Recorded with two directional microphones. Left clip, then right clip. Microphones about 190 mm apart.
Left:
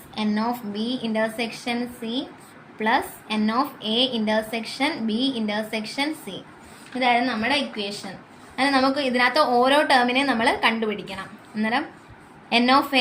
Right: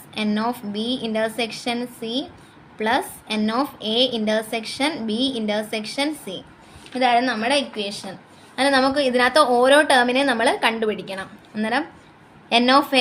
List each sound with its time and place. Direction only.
0.1 s a woman's voice: 45° right (ahead or behind)